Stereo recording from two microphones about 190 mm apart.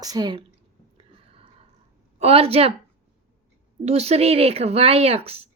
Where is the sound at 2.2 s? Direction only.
30° right (ahead or behind).